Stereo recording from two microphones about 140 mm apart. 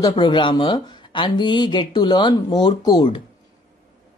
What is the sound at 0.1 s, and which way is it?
Speech, 35° left (ahead or behind).